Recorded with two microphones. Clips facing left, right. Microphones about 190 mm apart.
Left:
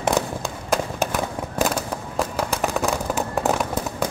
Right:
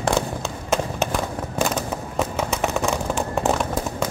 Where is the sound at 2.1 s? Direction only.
Centre (ahead or behind).